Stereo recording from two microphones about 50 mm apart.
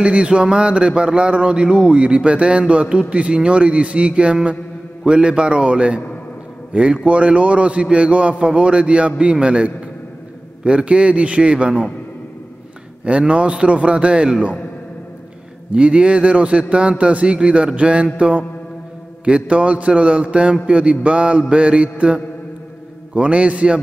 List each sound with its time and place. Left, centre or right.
0.0 s a man's voice: right
13.0 s speech: right
15.7 s speech: right